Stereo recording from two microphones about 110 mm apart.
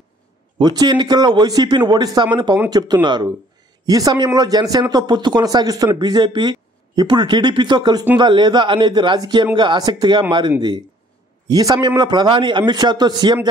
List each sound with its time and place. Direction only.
0.6 s a man's voice: 40° right (ahead or behind)
11.4 s speech: 35° right (ahead or behind)